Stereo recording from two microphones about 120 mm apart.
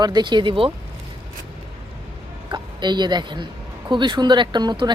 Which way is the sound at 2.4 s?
40° right (ahead or behind).